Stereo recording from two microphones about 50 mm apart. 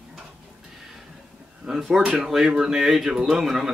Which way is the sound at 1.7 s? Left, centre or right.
Centre.